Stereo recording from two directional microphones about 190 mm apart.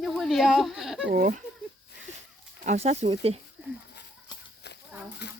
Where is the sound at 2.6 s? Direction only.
35° right (ahead or behind).